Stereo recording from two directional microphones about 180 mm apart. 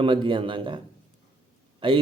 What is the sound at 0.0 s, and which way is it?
Speech, 30° right (ahead or behind).